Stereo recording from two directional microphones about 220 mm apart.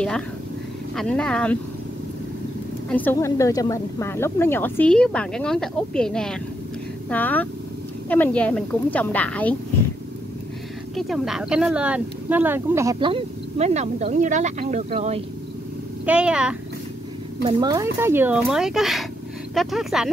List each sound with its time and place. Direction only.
0.9 s speech: 5° left (ahead or behind)
2.9 s speech: 10° left (ahead or behind)
11.0 s speech: centre (ahead or behind); by 15.2 s 30° right (ahead or behind)
16.1 s speech: 5° right (ahead or behind)
17.4 s speech: 20° right (ahead or behind); by 20.1 s centre (ahead or behind)